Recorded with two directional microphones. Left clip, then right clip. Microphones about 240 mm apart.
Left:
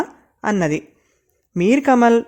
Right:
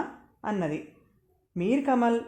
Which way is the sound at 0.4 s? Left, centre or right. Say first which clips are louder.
Left 11 dB; left.